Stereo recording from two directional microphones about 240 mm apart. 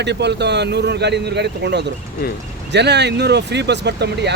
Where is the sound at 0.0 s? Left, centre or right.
Right.